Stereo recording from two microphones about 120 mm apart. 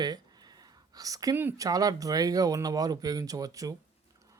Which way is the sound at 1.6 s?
30° right (ahead or behind).